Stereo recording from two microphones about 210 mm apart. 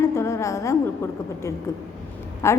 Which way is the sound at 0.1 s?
15° left (ahead or behind).